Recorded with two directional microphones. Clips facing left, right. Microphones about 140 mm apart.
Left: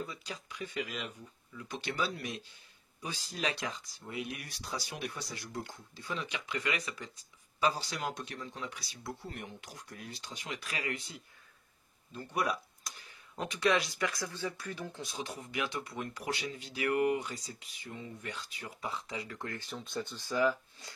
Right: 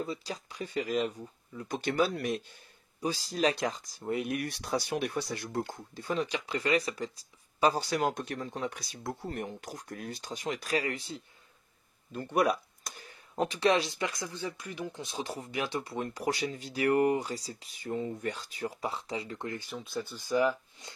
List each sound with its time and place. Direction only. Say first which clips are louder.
0.0 s speech: right 6 dB; 35° right (ahead or behind); by 2.4 s 55° right (ahead or behind)
3.0 s speech: right 8 dB; 35° right (ahead or behind)
7.7 s speech: right 8 dB; 50° right (ahead or behind); by 11.2 s 30° right (ahead or behind)
12.1 s a sound: right 6 dB; 55° right (ahead or behind)
13.4 s speech: right 4 dB; 30° right (ahead or behind); by 15.0 s 15° right (ahead or behind)
15.0 s speech: right 4 dB; 30° right (ahead or behind)